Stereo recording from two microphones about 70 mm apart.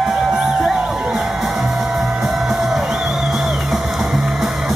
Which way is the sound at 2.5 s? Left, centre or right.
Centre.